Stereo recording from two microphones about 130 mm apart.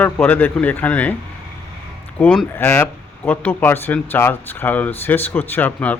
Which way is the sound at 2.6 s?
15° left (ahead or behind).